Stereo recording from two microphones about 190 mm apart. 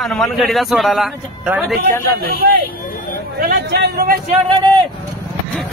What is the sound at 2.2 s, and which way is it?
A man's voice, 50° right (ahead or behind).